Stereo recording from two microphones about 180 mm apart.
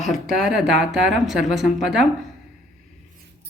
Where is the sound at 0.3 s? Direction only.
Centre (ahead or behind).